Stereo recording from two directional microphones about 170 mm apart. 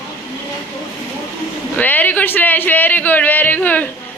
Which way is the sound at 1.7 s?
10° left (ahead or behind).